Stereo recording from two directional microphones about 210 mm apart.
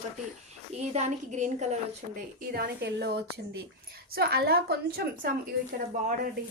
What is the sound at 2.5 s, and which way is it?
A woman's voice, 50° right (ahead or behind).